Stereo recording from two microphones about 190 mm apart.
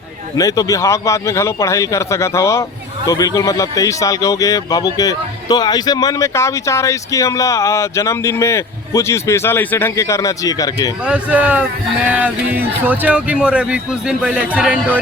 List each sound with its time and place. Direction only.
0.3 s a man's voice: 20° left (ahead or behind)
11.0 s speech: 5° right (ahead or behind)